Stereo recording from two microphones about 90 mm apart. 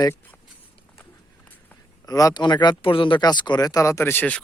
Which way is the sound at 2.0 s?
45° left (ahead or behind).